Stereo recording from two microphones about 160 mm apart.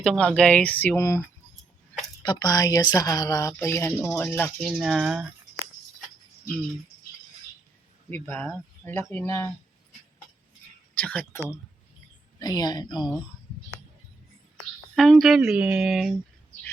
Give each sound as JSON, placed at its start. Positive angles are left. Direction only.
{"t": 0.0, "sound": "speech", "side_deg": 5}
{"t": 2.2, "sound": "speech", "side_deg": 25}
{"t": 4.8, "sound": "speech", "side_deg": 0}
{"t": 8.1, "sound": "speech", "side_deg": 10}
{"t": 10.9, "sound": "speech", "side_deg": 10}
{"t": 12.4, "sound": "speech", "side_deg": 25}
{"t": 14.9, "sound": "speech", "side_deg": 0}